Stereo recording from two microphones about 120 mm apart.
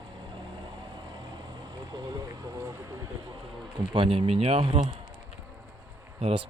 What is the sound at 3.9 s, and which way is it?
Speech, 45° right (ahead or behind).